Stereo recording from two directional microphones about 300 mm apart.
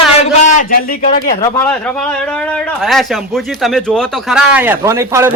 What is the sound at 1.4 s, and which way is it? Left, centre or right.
Speech, centre.